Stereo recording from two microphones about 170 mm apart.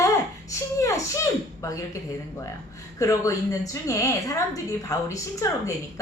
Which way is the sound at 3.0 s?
20° left (ahead or behind).